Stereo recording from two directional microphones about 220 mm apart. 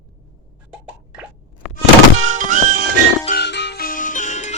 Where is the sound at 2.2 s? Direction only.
35° right (ahead or behind).